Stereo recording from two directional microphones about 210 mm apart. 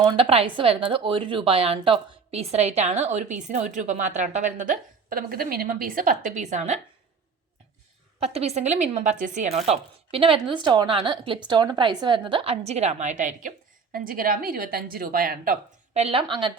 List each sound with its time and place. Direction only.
0.1 s a woman's voice: 25° right (ahead or behind)
8.2 s a woman's voice: 30° right (ahead or behind)
16.0 s a woman's voice: 25° right (ahead or behind)